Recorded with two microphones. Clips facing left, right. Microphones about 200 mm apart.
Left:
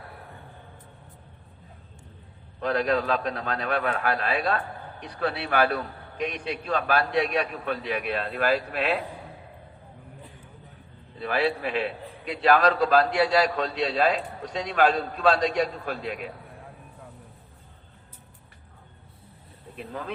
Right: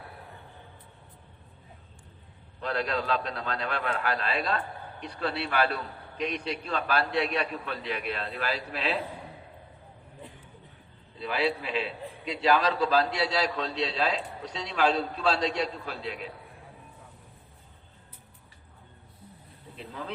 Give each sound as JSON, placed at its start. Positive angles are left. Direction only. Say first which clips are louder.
{"t": 2.6, "sound": "a man's voice", "louder": "left 6 dB", "side_deg": 50}
{"t": 11.2, "sound": "a man's voice", "louder": "left 3 dB", "side_deg": 55}
{"t": 19.7, "sound": "speech", "louder": "left 4 dB", "side_deg": 50}